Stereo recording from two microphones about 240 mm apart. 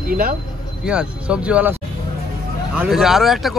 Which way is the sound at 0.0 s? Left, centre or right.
Right.